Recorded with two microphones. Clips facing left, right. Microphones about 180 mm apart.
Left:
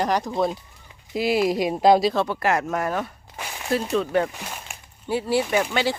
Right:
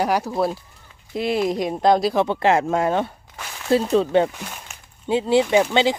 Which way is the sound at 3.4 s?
15° left (ahead or behind).